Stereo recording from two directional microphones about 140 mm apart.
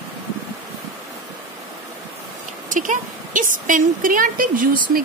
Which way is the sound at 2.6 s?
70° right (ahead or behind).